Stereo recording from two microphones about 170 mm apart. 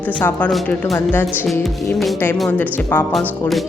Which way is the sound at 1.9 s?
Centre (ahead or behind).